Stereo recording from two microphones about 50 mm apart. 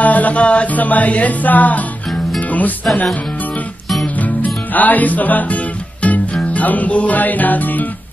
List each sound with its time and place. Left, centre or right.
0.0 s music: left
4.7 s music: left